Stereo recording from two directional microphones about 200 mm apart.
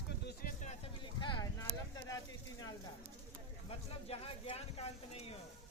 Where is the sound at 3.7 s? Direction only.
30° left (ahead or behind).